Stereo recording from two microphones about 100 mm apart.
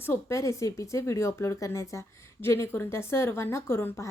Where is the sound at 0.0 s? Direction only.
25° left (ahead or behind).